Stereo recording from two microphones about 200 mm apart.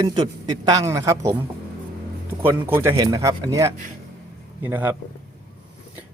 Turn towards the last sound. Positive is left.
turn(degrees=-10)  # may be behind; listen again after turning